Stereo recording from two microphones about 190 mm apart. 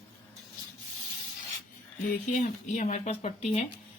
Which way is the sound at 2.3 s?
40° left (ahead or behind).